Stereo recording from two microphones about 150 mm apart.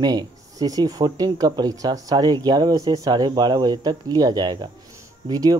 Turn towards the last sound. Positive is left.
turn(degrees=-25)  # may be behind; listen again after turning